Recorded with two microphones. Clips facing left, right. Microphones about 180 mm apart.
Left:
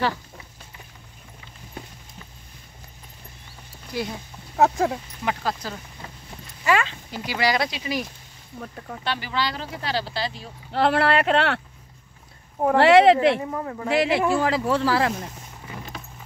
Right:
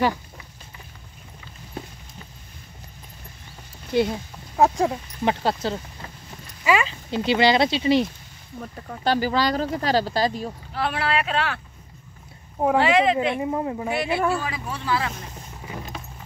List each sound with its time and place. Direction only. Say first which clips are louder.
3.9 s speech: right 8 dB; 25° right (ahead or behind)
4.6 s speech: right 1 dB; centre (ahead or behind)
5.2 s speech: right 5 dB; 30° right (ahead or behind)
6.6 s speech: right 1 dB; 5° right (ahead or behind)
7.1 s speech: right 8 dB; 25° right (ahead or behind)
8.5 s speech: even; centre (ahead or behind)
9.0 s speech: right 6 dB; 40° right (ahead or behind)
10.7 s speech: left 6 dB; 70° left (ahead or behind)
12.7 s speech: left 6 dB; 70° left (ahead or behind)
13.4 s speech: right 4 dB; 20° right (ahead or behind)
13.8 s speech: left 5 dB; 90° left